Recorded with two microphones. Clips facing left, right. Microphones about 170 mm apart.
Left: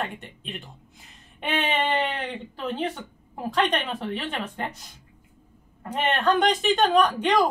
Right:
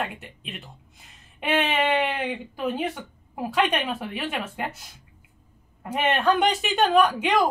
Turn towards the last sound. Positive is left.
turn(degrees=-5)  # may be behind; listen again after turning